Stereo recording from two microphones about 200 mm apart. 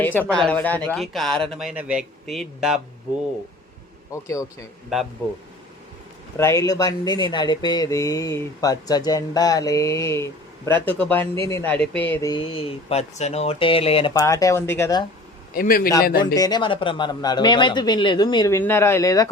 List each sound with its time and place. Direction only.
0.0 s speech: 10° left (ahead or behind)
4.1 s speech: 15° left (ahead or behind)
4.9 s speech: centre (ahead or behind)
6.3 s speech: 15° left (ahead or behind)
12.3 s speech: 25° left (ahead or behind)
14.1 s speech: 15° left (ahead or behind)
15.5 s a man's voice: 45° left (ahead or behind)
16.2 s speech: 20° left (ahead or behind)